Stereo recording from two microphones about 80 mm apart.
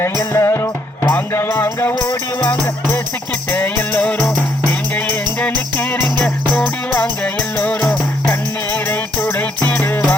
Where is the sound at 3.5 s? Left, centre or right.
Left.